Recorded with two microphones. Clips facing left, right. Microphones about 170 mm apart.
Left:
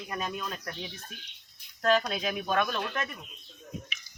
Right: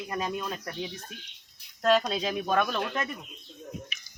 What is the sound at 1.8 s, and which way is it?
Speech, 20° right (ahead or behind).